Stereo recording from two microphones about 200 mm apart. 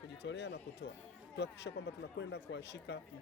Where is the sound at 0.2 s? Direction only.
60° left (ahead or behind).